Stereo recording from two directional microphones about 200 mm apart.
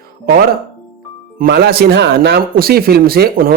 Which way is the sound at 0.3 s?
45° right (ahead or behind).